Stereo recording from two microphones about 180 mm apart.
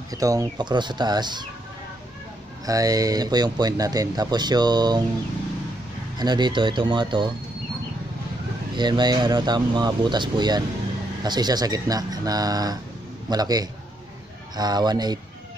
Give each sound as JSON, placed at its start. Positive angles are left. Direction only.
{"t": 0.1, "sound": "speech", "side_deg": -20}
{"t": 2.6, "sound": "speech", "side_deg": -20}
{"t": 6.1, "sound": "speech", "side_deg": -25}
{"t": 8.7, "sound": "speech", "side_deg": -25}